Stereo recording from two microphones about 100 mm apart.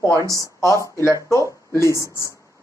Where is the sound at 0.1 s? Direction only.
30° right (ahead or behind).